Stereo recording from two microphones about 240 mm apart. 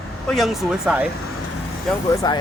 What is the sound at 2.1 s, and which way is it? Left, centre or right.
Speech, centre.